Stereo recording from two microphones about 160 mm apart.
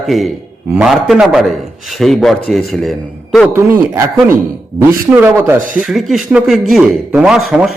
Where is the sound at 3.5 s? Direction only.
15° right (ahead or behind).